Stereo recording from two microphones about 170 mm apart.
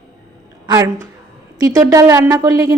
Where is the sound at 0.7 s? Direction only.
15° right (ahead or behind).